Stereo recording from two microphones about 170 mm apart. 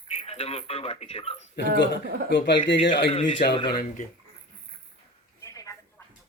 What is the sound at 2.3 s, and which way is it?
Speech, 90° left.